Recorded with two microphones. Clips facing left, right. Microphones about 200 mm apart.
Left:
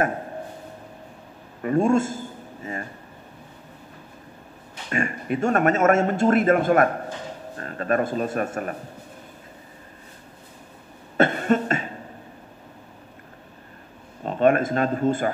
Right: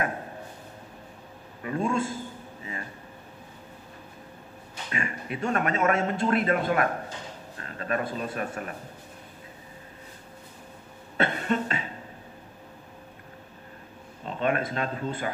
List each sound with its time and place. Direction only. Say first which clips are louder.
1.6 s speech: left 8 dB; 45° left (ahead or behind)
4.9 s a man's voice: left 8 dB; 45° left (ahead or behind)
11.1 s cough: left 6 dB; 45° left (ahead or behind)
14.2 s speech: left 8 dB; 45° left (ahead or behind)